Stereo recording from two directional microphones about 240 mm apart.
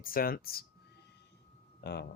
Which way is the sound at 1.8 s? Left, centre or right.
Left.